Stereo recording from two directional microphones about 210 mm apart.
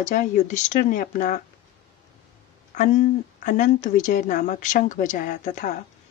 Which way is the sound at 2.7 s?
35° left (ahead or behind).